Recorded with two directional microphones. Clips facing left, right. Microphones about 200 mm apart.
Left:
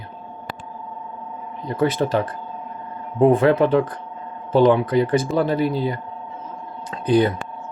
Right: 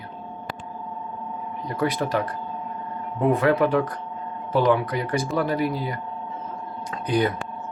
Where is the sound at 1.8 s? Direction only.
25° left (ahead or behind).